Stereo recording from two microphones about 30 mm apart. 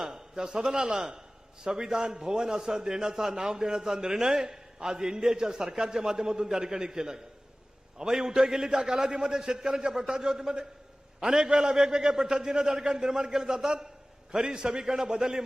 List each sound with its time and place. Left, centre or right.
0.0 s a man's voice: right